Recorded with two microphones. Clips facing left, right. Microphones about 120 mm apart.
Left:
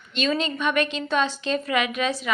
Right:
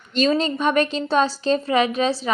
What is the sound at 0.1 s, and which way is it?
A woman's voice, 35° right (ahead or behind).